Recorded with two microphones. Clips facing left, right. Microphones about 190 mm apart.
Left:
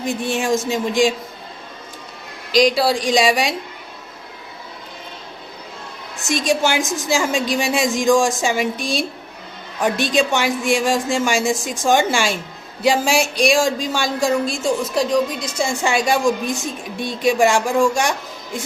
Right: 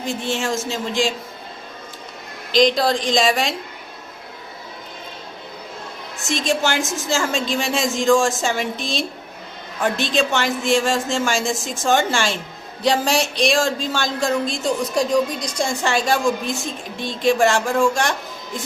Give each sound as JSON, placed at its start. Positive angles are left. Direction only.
{"t": 0.0, "sound": "speech", "side_deg": 15}
{"t": 2.6, "sound": "speech", "side_deg": 10}
{"t": 6.2, "sound": "speech", "side_deg": 15}